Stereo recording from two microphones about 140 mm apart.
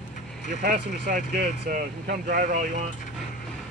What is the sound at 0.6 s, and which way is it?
Speech, 90° right.